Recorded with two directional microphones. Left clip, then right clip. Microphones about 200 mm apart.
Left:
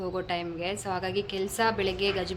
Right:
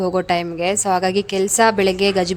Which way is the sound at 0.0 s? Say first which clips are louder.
Right 12 dB; 55° right (ahead or behind).